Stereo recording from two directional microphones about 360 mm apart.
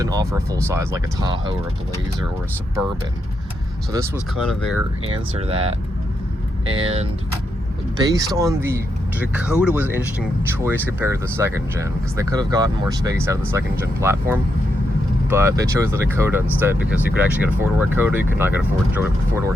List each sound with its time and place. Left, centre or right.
0.0 s speech: centre
3.9 s speech: centre
5.1 s speech: centre
6.8 s speech: centre